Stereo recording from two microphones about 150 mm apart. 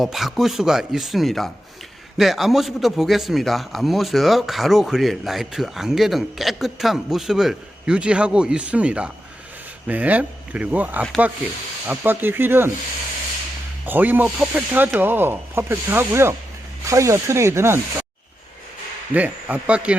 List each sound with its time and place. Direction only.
0.0 s speech: centre (ahead or behind)
13.8 s speech: 10° right (ahead or behind)
16.8 s snake: 20° right (ahead or behind)
19.1 s speech: 10° right (ahead or behind)